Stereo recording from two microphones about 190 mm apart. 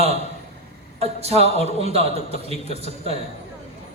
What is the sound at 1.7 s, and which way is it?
A man's voice, 30° right (ahead or behind).